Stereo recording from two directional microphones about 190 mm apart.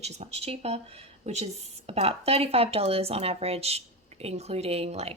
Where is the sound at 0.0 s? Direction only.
35° right (ahead or behind).